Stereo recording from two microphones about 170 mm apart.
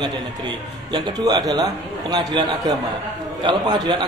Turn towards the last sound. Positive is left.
turn(degrees=-25)  # may be behind; listen again after turning